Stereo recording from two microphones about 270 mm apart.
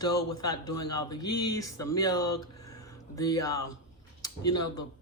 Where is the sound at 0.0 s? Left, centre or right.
Centre.